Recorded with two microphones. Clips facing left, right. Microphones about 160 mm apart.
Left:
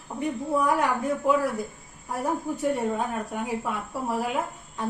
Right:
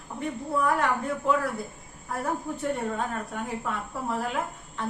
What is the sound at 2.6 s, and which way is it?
A woman's voice, 10° left (ahead or behind).